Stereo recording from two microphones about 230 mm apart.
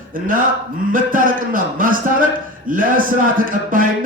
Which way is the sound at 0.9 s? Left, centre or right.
Right.